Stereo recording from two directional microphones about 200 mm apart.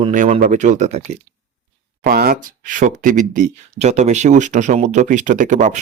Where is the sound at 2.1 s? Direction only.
45° right (ahead or behind).